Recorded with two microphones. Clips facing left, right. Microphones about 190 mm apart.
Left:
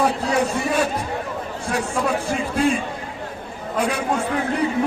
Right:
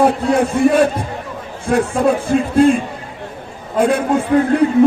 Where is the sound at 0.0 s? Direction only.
55° right (ahead or behind).